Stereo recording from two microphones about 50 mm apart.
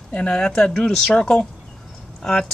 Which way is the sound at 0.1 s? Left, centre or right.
Centre.